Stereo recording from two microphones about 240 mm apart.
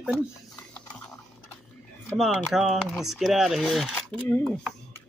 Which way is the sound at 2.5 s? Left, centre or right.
Centre.